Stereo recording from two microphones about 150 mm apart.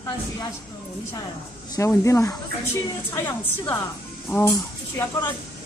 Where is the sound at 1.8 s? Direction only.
20° left (ahead or behind).